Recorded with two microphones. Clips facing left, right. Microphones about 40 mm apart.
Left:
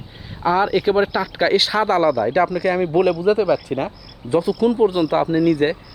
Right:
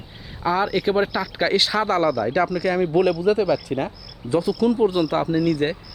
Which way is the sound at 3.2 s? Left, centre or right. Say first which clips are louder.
Left 2 dB; left.